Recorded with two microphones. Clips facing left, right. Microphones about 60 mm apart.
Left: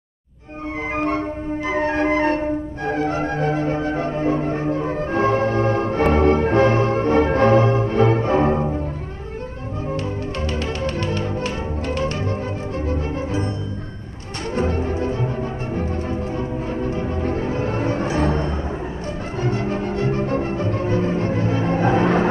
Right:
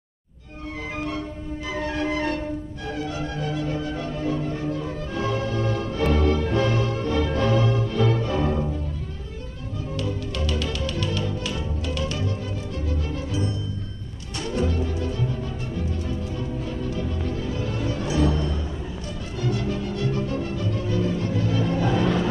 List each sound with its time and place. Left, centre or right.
0.9 s music: left
9.9 s music: left
14.5 s music: left